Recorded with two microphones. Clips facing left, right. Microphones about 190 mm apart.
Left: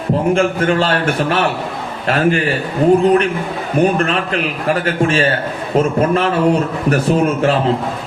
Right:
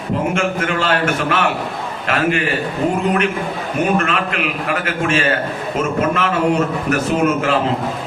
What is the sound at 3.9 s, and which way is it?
A man's voice, 35° left (ahead or behind).